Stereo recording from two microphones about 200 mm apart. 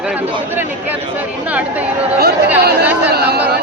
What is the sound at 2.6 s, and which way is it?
Speech, 55° right (ahead or behind).